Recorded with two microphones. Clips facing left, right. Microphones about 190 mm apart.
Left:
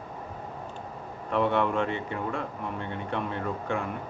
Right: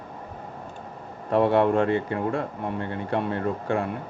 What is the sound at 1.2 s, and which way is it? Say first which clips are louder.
Speech: right 6 dB; 35° right (ahead or behind).